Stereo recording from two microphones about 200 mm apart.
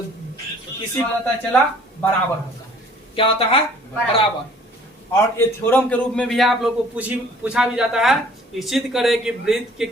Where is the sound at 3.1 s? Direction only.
25° left (ahead or behind).